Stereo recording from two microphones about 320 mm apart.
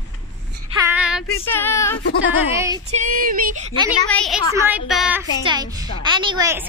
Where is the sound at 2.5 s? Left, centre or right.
Centre.